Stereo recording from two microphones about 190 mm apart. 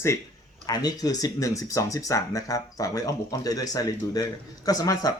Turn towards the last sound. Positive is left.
turn(degrees=20)  # may be behind; listen again after turning